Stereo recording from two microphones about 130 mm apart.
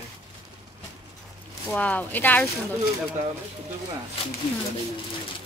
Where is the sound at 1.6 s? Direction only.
10° left (ahead or behind).